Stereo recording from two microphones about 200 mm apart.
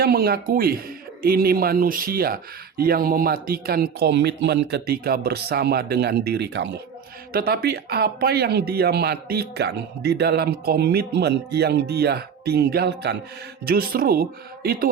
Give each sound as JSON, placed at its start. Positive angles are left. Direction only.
{"t": 0.0, "sound": "speech", "side_deg": -50}